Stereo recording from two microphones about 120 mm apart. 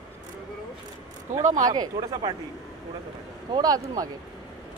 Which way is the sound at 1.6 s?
35° right (ahead or behind).